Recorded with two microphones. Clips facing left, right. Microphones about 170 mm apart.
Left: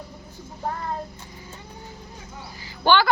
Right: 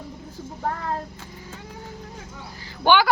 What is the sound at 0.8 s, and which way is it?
Child singing, 90° right.